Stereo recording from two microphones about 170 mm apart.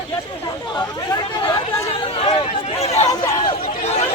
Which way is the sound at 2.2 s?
30° left (ahead or behind).